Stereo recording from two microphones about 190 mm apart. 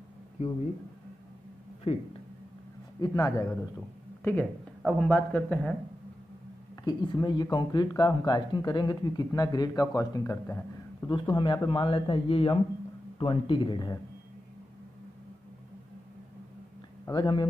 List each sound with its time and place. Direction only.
1.9 s speech: 35° left (ahead or behind)
3.0 s a man's voice: 20° left (ahead or behind)
6.8 s speech: 25° left (ahead or behind)
11.1 s speech: 25° left (ahead or behind)
17.0 s speech: 25° left (ahead or behind)